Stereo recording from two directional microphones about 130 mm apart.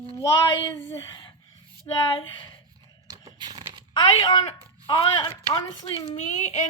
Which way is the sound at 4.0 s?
35° left (ahead or behind).